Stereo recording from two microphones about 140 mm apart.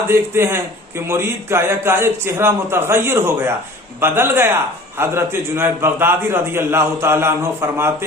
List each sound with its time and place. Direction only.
0.1 s a man's voice: 15° right (ahead or behind)